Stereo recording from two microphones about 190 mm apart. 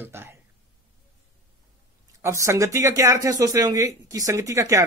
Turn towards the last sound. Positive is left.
turn(degrees=-15)  # may be behind; listen again after turning